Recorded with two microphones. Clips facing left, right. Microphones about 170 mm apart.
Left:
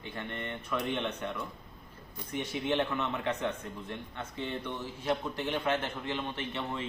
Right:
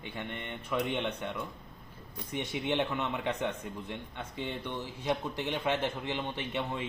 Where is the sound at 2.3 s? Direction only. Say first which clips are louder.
Left 1 dB; 15° right (ahead or behind).